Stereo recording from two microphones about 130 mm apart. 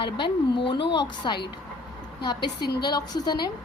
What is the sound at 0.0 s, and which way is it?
A woman's voice, 40° left (ahead or behind).